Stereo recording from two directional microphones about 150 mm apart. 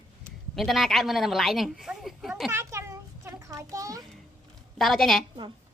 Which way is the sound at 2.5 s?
20° right (ahead or behind).